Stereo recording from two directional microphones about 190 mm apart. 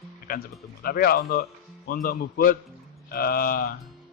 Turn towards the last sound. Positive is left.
turn(degrees=50)  # may be behind; listen again after turning